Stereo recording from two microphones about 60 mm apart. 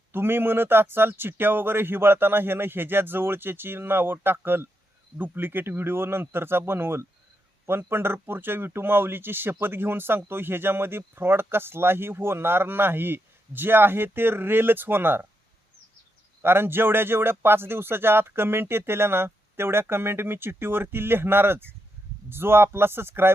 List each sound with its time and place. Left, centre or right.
0.1 s speech: right
16.4 s speech: right